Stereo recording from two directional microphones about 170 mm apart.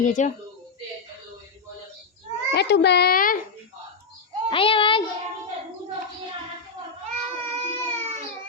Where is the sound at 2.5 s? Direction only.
80° left; by 3.4 s 55° left (ahead or behind).